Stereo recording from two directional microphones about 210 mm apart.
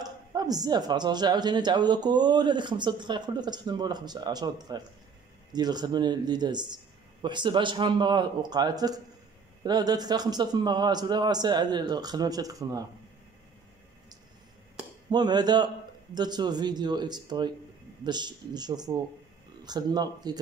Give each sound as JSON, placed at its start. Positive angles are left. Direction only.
{"t": 0.0, "sound": "a woman's voice", "side_deg": -20}
{"t": 15.0, "sound": "a woman's voice", "side_deg": -20}